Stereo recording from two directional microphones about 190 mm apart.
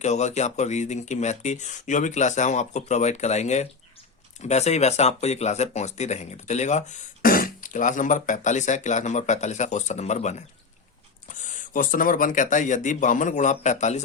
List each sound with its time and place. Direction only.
0.0 s speech: 35° left (ahead or behind)